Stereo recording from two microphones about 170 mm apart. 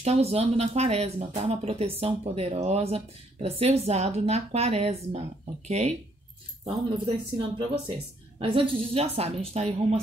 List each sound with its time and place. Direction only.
0.0 s speech: 40° right (ahead or behind)